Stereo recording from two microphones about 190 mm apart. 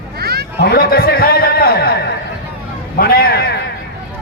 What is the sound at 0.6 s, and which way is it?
A man's voice, 55° left (ahead or behind).